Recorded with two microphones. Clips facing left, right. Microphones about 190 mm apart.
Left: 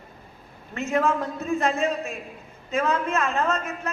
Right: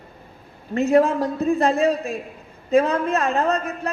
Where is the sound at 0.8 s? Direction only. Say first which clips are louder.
Right 7 dB; 35° right (ahead or behind).